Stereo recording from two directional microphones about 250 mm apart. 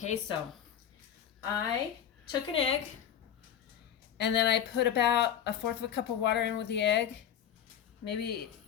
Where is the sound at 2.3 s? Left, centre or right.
Left.